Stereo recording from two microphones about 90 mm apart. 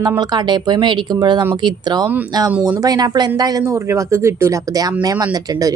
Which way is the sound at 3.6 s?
30° right (ahead or behind).